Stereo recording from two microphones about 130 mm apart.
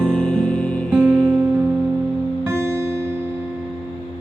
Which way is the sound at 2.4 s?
20° right (ahead or behind).